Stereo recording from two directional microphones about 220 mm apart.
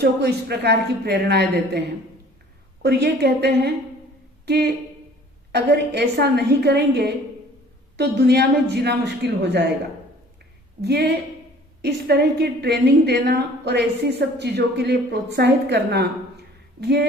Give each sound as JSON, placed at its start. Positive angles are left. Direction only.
{"t": 0.0, "sound": "a woman's voice", "side_deg": -45}
{"t": 2.8, "sound": "a woman's voice", "side_deg": -50}
{"t": 10.8, "sound": "a woman's voice", "side_deg": -50}